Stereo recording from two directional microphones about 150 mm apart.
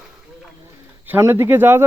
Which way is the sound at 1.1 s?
15° right (ahead or behind).